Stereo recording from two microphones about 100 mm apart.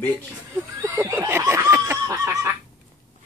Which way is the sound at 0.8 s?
30° right (ahead or behind).